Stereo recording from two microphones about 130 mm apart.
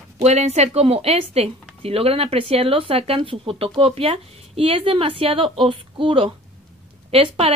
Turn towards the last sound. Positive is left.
turn(degrees=-50)  # may be behind; listen again after turning